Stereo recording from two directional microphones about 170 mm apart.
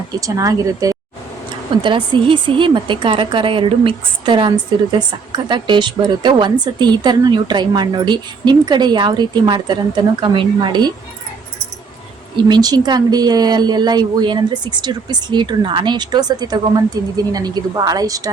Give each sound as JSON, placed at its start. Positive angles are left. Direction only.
{"t": 0.2, "sound": "a woman's voice", "side_deg": -20}
{"t": 12.5, "sound": "a woman's voice", "side_deg": -25}